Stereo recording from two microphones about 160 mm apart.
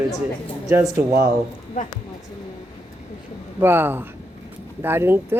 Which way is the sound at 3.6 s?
15° right (ahead or behind).